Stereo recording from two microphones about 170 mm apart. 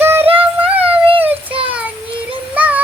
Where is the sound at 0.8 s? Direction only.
30° right (ahead or behind).